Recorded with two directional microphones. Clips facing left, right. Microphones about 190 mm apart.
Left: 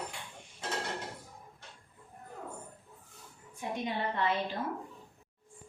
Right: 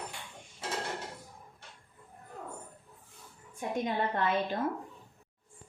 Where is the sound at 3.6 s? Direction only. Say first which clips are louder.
Right 2 dB; 50° right (ahead or behind).